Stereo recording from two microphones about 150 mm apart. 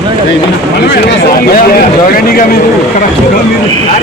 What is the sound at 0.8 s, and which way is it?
Speech, 90° left.